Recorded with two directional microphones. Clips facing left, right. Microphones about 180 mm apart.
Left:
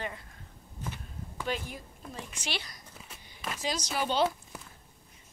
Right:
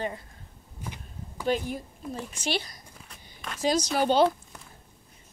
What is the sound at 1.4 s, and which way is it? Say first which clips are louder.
A woman's voice: right 8 dB; 40° right (ahead or behind).